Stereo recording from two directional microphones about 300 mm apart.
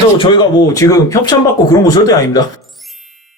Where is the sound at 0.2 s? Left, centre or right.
Centre.